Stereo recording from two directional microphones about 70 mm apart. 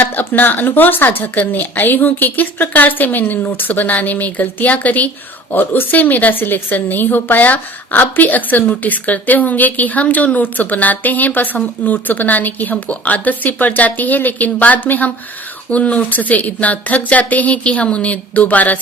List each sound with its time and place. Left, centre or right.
0.0 s a woman's voice: left